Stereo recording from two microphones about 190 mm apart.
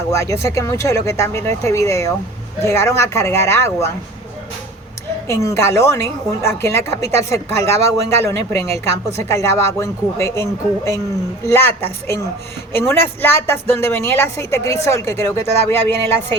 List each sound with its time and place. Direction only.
0.1 s speech: 15° left (ahead or behind)
5.3 s speech: 15° left (ahead or behind)